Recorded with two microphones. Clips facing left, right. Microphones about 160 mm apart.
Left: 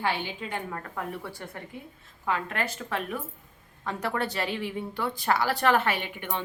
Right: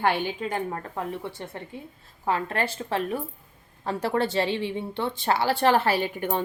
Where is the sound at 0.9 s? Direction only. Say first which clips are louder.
Right 3 dB; 25° right (ahead or behind).